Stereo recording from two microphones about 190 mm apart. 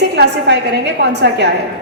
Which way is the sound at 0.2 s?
65° right (ahead or behind).